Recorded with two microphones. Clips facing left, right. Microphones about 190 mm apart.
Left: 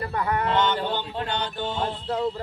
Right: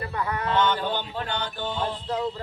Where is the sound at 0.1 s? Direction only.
30° left (ahead or behind).